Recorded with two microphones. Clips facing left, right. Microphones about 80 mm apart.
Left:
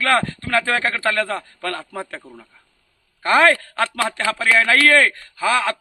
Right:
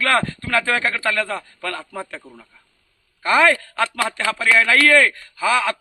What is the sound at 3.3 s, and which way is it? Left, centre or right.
A man's voice, left.